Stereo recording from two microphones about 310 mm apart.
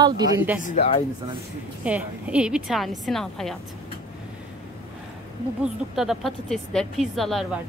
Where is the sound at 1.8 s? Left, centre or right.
Centre.